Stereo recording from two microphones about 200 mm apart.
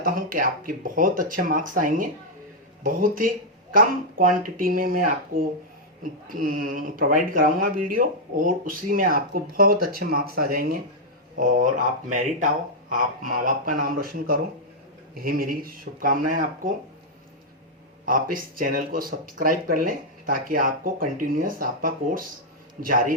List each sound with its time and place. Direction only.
0.0 s speech: 45° right (ahead or behind)
18.0 s speech: 45° right (ahead or behind)